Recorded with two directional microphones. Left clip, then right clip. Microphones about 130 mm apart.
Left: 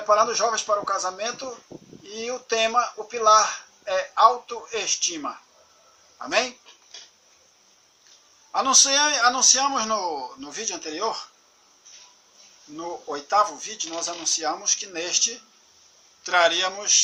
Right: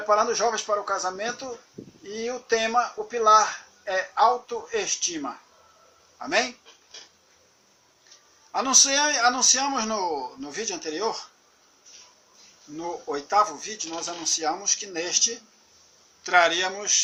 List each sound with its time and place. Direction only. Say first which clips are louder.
0.1 s a man's voice: left 2 dB; 20° left (ahead or behind)
8.5 s a man's voice: left 2 dB; 20° left (ahead or behind)
12.7 s a man's voice: right 1 dB; 15° left (ahead or behind)